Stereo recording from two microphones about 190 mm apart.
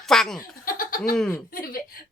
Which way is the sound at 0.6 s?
50° left (ahead or behind).